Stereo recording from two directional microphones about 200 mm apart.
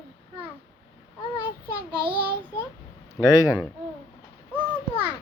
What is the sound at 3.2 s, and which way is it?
Speech, 15° left (ahead or behind).